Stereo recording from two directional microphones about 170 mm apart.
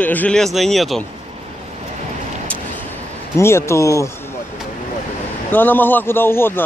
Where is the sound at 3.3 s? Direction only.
15° left (ahead or behind).